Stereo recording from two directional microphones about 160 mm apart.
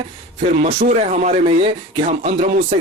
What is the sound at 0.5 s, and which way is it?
Speech, 50° right (ahead or behind).